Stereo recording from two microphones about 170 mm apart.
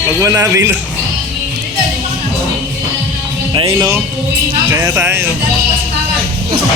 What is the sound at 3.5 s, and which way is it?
A man's voice, 25° right (ahead or behind).